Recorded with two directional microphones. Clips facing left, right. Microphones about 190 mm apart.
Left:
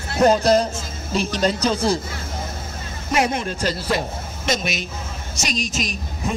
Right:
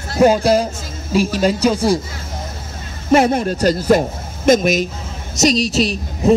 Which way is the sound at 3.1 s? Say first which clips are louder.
Right 8 dB; 35° right (ahead or behind).